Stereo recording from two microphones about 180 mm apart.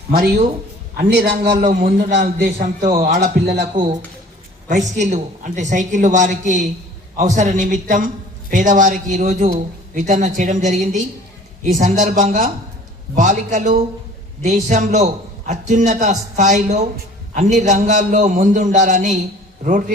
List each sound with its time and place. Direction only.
0.9 s a man's voice: 55° right (ahead or behind)
1.5 s a man's voice: 45° right (ahead or behind); by 3.7 s 65° right (ahead or behind)
4.7 s a man's voice: 40° right (ahead or behind)